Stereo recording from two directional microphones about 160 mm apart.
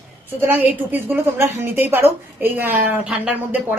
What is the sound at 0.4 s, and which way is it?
A woman's voice, 10° right (ahead or behind).